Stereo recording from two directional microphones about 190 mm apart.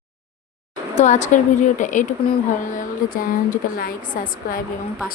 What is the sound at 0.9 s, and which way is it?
A woman's voice, 40° left (ahead or behind).